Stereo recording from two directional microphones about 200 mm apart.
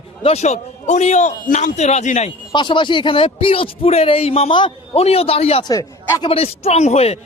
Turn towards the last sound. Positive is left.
turn(degrees=30)  # may be behind; listen again after turning